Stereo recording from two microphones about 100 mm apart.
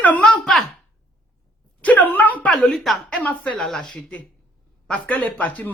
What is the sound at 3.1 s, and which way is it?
A woman's voice, 15° left (ahead or behind).